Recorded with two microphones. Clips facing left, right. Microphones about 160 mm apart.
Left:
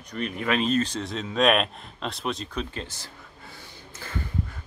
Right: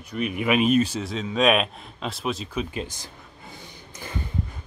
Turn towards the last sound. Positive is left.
turn(degrees=-15)  # may be behind; listen again after turning